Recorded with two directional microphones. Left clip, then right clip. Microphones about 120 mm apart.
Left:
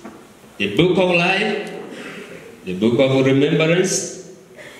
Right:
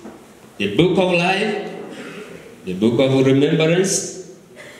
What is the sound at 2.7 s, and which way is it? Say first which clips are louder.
A man's voice: even; 10° right (ahead or behind).